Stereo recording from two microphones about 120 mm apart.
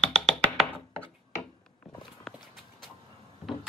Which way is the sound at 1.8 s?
5° left (ahead or behind).